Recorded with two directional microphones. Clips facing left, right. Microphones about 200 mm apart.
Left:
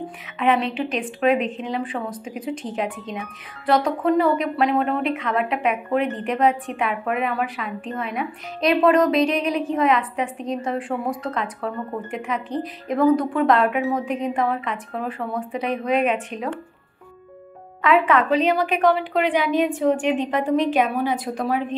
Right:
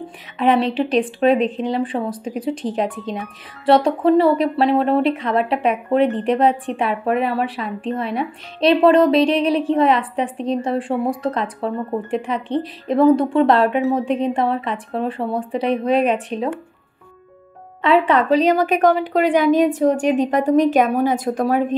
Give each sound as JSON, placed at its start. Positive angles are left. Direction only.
{"t": 0.4, "sound": "a woman's voice", "side_deg": -35}
{"t": 17.8, "sound": "a woman's voice", "side_deg": -30}